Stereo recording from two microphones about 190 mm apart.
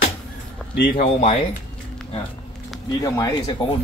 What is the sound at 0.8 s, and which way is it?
Speech, 50° left (ahead or behind).